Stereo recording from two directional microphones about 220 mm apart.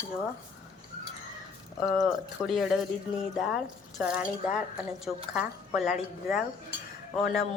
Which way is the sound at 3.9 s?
5° right (ahead or behind).